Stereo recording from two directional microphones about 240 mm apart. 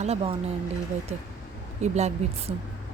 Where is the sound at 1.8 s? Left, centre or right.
Right.